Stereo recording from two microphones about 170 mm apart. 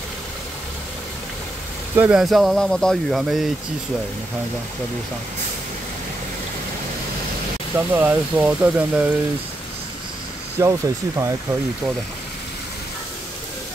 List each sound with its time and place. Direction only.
2.0 s speech: 5° right (ahead or behind)
7.7 s speech: 10° right (ahead or behind)
10.6 s speech: 15° right (ahead or behind)